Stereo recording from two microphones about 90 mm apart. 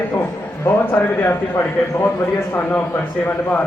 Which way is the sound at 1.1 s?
25° left (ahead or behind).